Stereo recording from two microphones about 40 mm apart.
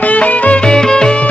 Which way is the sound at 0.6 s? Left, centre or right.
Centre.